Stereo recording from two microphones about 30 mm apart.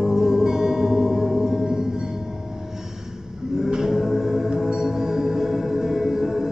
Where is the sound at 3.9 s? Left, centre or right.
Centre.